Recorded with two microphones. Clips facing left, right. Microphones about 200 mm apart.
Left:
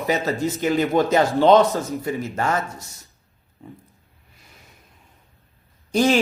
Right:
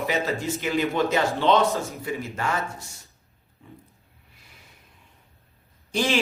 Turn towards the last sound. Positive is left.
turn(degrees=40)  # may be behind; listen again after turning